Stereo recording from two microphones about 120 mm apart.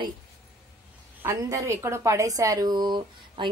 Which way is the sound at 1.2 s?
25° right (ahead or behind).